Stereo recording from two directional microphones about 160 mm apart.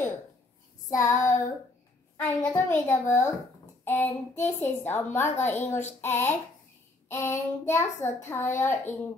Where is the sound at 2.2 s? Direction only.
15° left (ahead or behind).